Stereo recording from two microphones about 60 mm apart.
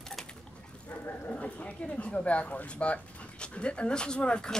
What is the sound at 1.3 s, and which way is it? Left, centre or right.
Speech, left.